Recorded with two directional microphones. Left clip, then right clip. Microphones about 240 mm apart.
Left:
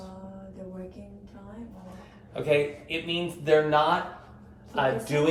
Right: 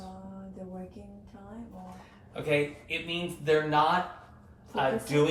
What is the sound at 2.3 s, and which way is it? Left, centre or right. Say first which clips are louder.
A man's voice: left 4 dB; centre.